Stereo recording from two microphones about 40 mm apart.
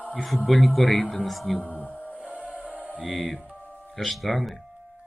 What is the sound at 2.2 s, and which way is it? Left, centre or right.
Music, right.